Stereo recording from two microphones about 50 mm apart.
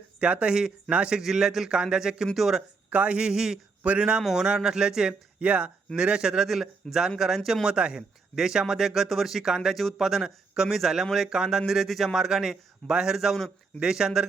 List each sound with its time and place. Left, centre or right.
0.2 s a man's voice: right
1.2 s a man's voice: centre
2.2 s speech: centre
2.9 s a man's voice: right
3.8 s a man's voice: right
4.4 s a man's voice: centre
5.4 s a man's voice: right; by 7.7 s centre
7.7 s a man's voice: right
8.4 s a man's voice: centre